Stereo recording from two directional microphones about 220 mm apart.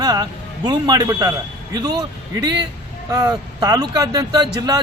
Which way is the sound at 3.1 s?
15° right (ahead or behind).